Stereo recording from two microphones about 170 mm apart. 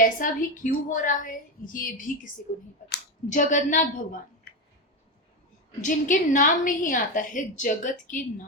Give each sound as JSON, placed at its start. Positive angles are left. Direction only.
{"t": 0.0, "sound": "a woman's voice", "side_deg": 55}
{"t": 5.8, "sound": "a woman's voice", "side_deg": 50}